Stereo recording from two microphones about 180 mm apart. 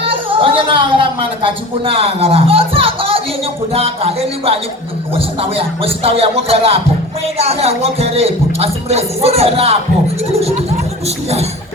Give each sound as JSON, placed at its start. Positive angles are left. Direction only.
{"t": 0.0, "sound": "speech", "side_deg": -30}